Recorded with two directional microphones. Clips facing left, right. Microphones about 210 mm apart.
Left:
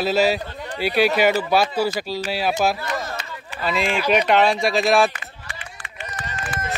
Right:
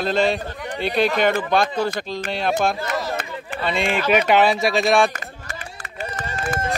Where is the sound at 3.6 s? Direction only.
Centre (ahead or behind).